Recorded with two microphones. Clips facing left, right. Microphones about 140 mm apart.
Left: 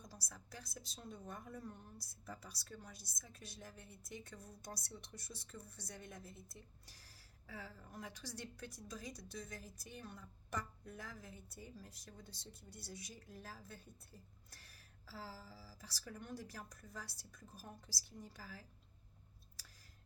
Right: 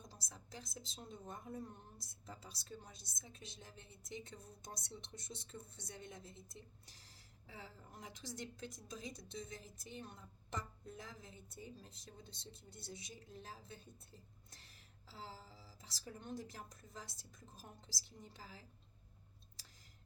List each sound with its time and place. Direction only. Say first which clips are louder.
0.0 s a woman's voice: left 1 dB; 25° right (ahead or behind)